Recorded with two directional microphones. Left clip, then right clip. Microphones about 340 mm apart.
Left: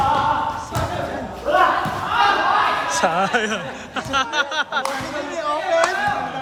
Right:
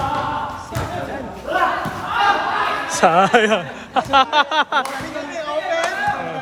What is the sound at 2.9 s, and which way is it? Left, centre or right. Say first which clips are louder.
Speech: right 5 dB; centre.